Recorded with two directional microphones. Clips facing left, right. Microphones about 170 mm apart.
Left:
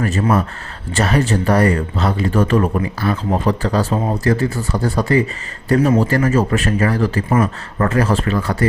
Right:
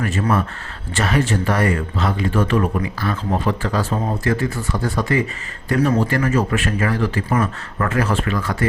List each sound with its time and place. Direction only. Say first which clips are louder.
0.0 s speech: left 3 dB; 40° left (ahead or behind)
7.3 s speech: left 4 dB; 25° left (ahead or behind)
7.9 s speech: left 3 dB; 35° left (ahead or behind)